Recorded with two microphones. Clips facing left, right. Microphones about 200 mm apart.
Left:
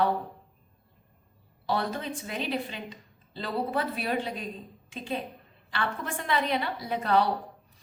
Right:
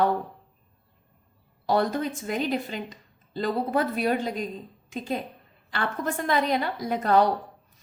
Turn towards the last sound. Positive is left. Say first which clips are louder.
# right 4 dB
turn(degrees=-45)  # may be behind; listen again after turning